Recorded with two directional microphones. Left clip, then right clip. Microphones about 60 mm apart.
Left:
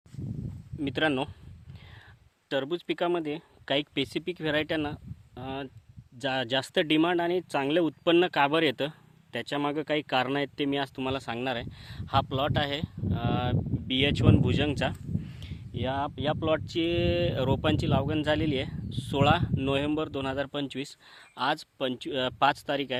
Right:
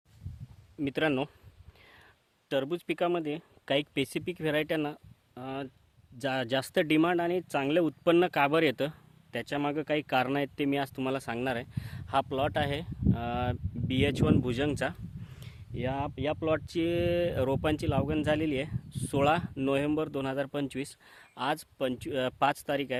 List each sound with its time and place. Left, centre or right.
0.8 s speech: right
2.5 s speech: right
4.3 s speech: centre; by 9.4 s right
9.4 s speech: right
11.8 s a sound: right
12.3 s speech: right
15.7 s speech: centre
16.6 s speech: right; by 18.8 s centre
18.9 s speech: right
20.7 s speech: right
21.1 s a sound: centre
21.8 s speech: centre